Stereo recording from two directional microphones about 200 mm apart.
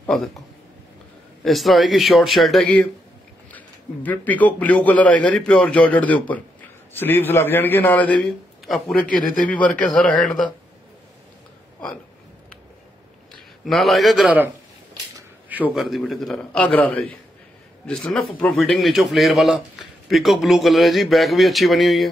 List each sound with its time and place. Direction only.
0.0 s speech: centre (ahead or behind)
1.4 s a man's voice: centre (ahead or behind)
9.0 s a man's voice: 45° left (ahead or behind)
9.3 s a man's voice: 5° left (ahead or behind)
13.7 s a man's voice: centre (ahead or behind)
15.6 s a man's voice: centre (ahead or behind)